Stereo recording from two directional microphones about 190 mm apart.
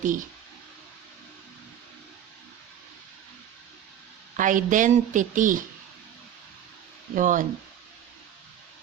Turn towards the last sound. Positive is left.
turn(degrees=-45)  # may be behind; listen again after turning